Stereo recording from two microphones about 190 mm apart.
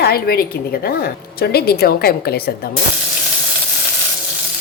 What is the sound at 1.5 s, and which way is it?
Frying, 55° left (ahead or behind).